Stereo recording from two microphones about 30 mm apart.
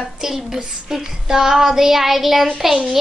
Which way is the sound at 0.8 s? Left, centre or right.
Centre.